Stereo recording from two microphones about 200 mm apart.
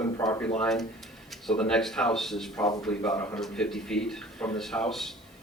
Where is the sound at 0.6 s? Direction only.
Centre (ahead or behind).